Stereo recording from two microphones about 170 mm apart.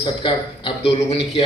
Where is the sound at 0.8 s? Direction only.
35° left (ahead or behind).